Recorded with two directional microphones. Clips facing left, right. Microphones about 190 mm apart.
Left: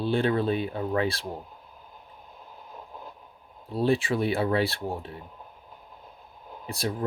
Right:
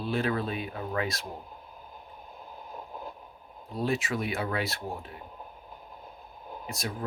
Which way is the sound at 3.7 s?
30° left (ahead or behind).